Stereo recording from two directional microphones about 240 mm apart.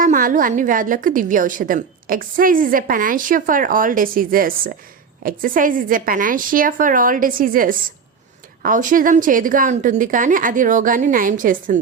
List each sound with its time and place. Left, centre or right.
0.0 s a woman's voice: right